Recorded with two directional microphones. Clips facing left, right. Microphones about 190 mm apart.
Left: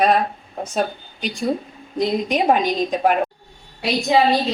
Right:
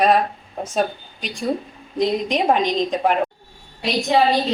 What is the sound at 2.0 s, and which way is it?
Speech, 5° left (ahead or behind).